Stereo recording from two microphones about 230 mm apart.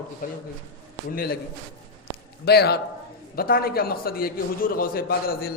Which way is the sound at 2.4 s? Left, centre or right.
Left.